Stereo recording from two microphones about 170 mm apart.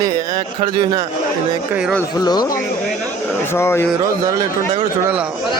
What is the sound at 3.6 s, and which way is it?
Speech, 15° left (ahead or behind).